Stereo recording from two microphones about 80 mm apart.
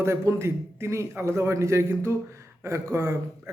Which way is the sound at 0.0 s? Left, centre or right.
Right.